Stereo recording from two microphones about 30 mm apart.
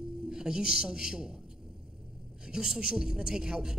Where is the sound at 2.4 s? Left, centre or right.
Centre.